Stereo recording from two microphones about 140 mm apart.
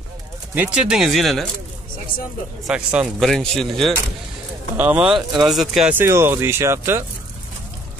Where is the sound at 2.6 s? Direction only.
5° right (ahead or behind).